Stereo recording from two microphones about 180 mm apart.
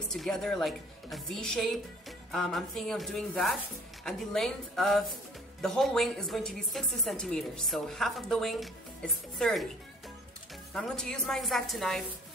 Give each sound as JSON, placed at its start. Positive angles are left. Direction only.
{"t": 0.1, "sound": "a woman's voice", "side_deg": 5}
{"t": 10.7, "sound": "a woman's voice", "side_deg": 5}